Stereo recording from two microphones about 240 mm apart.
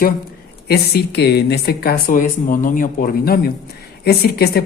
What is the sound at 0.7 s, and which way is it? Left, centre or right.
Speech, left.